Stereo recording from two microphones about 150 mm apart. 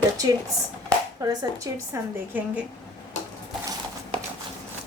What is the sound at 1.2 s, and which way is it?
Speech, 25° right (ahead or behind).